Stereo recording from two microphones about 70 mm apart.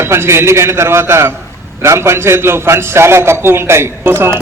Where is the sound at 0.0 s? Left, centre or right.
Right.